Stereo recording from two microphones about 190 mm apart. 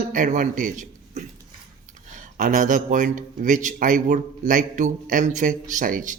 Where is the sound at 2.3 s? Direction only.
45° right (ahead or behind).